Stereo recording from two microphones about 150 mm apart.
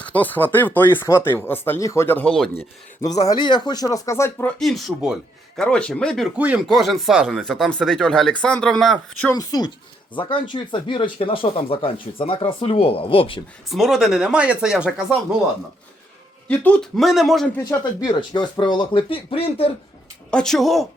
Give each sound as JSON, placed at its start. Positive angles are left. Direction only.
{"t": 0.0, "sound": "speech", "side_deg": 10}
{"t": 3.2, "sound": "speech", "side_deg": 30}
{"t": 6.3, "sound": "speech", "side_deg": -10}
{"t": 9.3, "sound": "speech", "side_deg": 25}
{"t": 13.7, "sound": "speech", "side_deg": 0}
{"t": 16.5, "sound": "speech", "side_deg": 10}
{"t": 17.6, "sound": "speech", "side_deg": 25}
{"t": 20.3, "sound": "speech", "side_deg": 5}